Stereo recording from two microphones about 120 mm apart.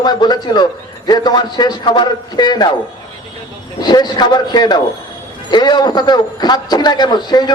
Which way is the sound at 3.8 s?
35° left (ahead or behind).